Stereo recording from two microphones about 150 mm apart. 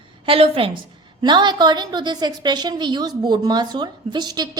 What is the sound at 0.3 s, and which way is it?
A woman's voice, 40° right (ahead or behind).